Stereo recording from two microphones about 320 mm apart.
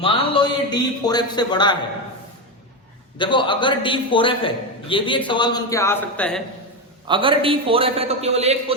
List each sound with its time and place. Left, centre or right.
0.0 s a man's voice: centre
3.2 s a man's voice: centre
7.1 s a man's voice: centre